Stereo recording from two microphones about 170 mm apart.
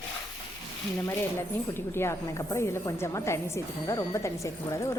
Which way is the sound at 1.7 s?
15° left (ahead or behind).